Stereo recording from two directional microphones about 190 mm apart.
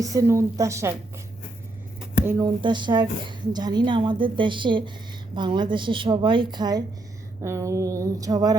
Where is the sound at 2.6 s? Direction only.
25° right (ahead or behind).